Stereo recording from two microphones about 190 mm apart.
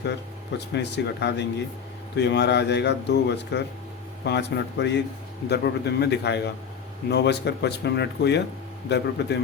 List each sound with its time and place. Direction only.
0.7 s a man's voice: 65° left (ahead or behind)